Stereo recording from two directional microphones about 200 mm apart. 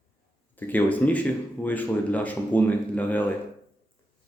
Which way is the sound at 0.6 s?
10° left (ahead or behind).